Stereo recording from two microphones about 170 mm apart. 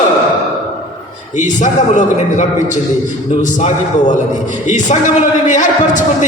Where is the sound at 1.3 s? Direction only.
45° left (ahead or behind).